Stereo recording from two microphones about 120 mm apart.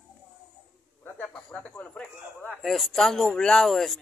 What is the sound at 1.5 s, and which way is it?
A man's voice, 10° left (ahead or behind).